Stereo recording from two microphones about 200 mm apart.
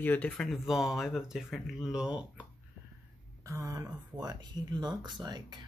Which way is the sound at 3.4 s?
15° right (ahead or behind).